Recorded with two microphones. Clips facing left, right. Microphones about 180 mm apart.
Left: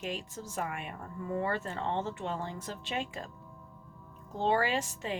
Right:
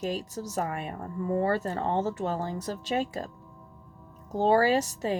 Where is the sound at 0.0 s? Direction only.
40° right (ahead or behind).